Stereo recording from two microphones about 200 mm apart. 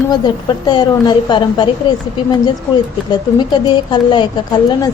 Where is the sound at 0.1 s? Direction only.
20° left (ahead or behind).